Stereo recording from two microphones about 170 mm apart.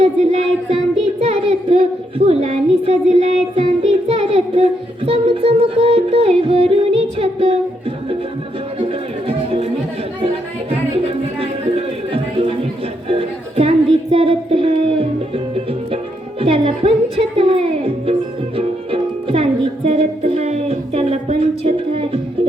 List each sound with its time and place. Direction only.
0.0 s a sound: 40° right (ahead or behind)
8.9 s music: 35° right (ahead or behind)
10.7 s music: 35° right (ahead or behind)